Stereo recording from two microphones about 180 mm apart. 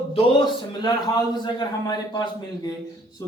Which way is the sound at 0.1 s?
25° left (ahead or behind).